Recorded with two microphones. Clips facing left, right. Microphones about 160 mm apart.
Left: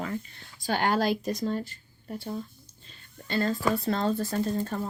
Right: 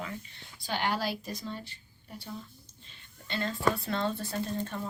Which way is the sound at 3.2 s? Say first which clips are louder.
Left 3 dB; 40° left (ahead or behind).